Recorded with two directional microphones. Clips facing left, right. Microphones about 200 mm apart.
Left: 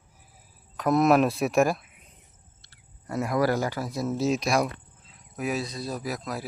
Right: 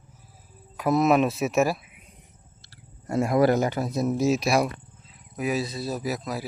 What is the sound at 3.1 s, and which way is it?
A man's voice, 25° right (ahead or behind).